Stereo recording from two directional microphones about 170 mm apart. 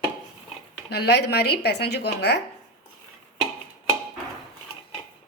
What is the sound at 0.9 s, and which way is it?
Speech, 70° left (ahead or behind).